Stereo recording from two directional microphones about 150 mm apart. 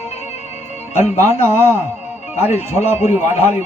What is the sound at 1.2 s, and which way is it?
Speech, 50° left (ahead or behind).